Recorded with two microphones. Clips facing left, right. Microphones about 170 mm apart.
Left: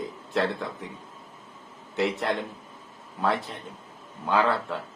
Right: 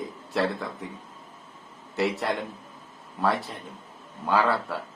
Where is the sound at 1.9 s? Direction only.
Centre (ahead or behind).